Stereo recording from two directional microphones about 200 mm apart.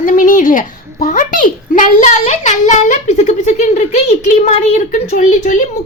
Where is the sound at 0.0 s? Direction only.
40° left (ahead or behind).